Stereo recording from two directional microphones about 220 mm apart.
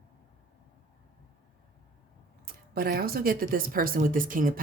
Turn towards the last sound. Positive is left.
turn(degrees=-40)  # may be behind; listen again after turning